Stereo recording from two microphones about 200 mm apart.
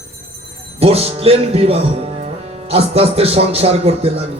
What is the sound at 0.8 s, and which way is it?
A man's voice, 30° right (ahead or behind).